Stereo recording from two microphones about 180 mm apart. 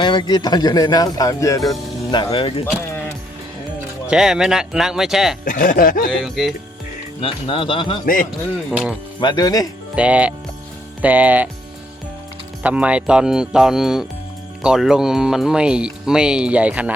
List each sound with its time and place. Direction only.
0.0 s speech: 25° left (ahead or behind)
4.1 s speech: 5° right (ahead or behind)
5.5 s speech: 50° left (ahead or behind)
6.1 s speech: centre (ahead or behind)
7.2 s speech: 30° left (ahead or behind)
8.0 s speech: 50° left (ahead or behind)
8.7 s speech: 5° right (ahead or behind)
9.2 s speech: 25° left (ahead or behind)
9.9 s speech: 5° right (ahead or behind)
12.6 s speech: 5° right (ahead or behind)